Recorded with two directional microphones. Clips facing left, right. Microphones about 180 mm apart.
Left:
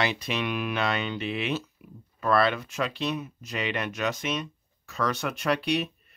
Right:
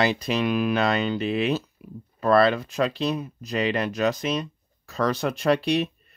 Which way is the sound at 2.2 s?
35° right (ahead or behind).